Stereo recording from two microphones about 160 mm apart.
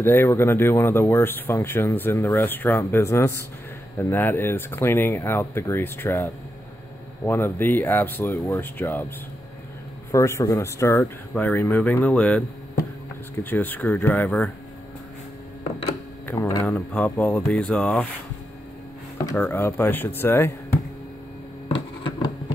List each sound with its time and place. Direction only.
0.0 s speech: 15° left (ahead or behind)
10.1 s speech: 20° left (ahead or behind)
16.3 s speech: 25° left (ahead or behind)
16.6 s speech: 10° left (ahead or behind)
19.3 s speech: 15° left (ahead or behind)
21.6 s a sound: 30° left (ahead or behind)